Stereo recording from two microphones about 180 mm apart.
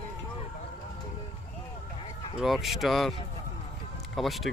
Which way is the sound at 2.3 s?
Centre (ahead or behind).